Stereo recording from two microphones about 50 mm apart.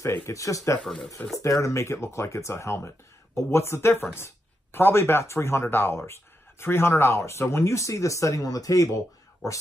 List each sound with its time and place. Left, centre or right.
0.3 s speech: left
4.7 s speech: left
5.2 s speech: left